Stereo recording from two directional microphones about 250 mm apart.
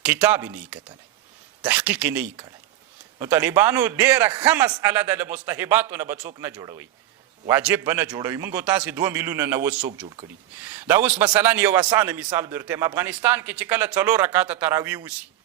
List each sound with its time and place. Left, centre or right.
0.0 s a man's voice: centre
10.8 s a man's voice: centre